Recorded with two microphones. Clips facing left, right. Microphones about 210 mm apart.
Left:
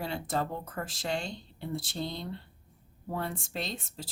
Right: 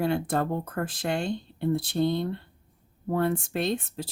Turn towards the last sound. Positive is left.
turn(degrees=-60)  # may be behind; listen again after turning